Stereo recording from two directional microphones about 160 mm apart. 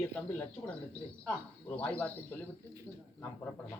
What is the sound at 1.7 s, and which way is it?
Speech, 10° left (ahead or behind).